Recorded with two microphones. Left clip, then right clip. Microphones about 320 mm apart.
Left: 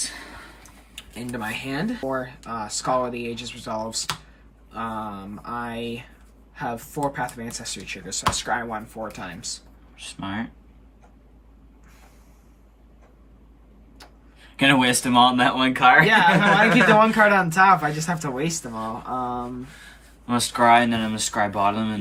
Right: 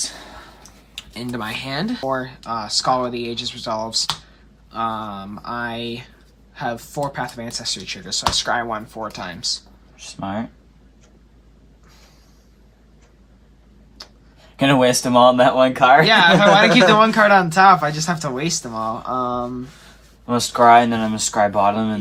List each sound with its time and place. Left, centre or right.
1.1 s speech: centre
14.5 s speech: centre